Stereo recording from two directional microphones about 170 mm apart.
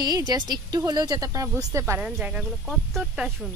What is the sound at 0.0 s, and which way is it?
Speech, 25° right (ahead or behind).